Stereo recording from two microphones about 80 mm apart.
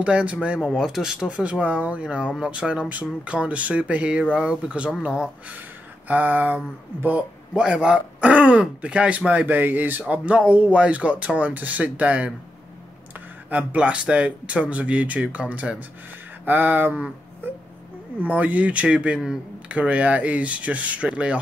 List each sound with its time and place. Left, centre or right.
0.0 s speech: centre
0.6 s speech: centre
13.5 s speech: centre
16.4 s a sound: right
18.2 s speech: centre